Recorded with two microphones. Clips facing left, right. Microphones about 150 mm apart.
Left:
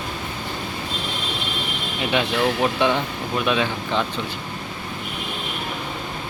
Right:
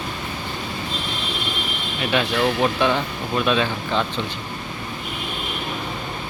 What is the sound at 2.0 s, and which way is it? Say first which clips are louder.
Speech: even; 20° left (ahead or behind).